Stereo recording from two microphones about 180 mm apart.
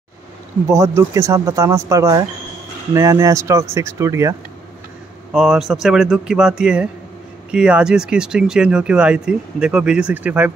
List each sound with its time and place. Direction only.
0.7 s speech: 15° right (ahead or behind)
5.3 s speech: 5° right (ahead or behind)